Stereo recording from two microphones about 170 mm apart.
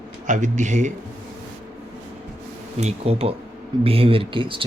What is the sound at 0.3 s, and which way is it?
Speech, 45° right (ahead or behind).